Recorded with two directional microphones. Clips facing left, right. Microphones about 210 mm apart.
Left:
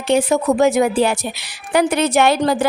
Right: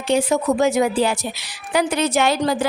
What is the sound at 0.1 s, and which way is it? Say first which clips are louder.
A woman's voice: left 3 dB; 55° left (ahead or behind).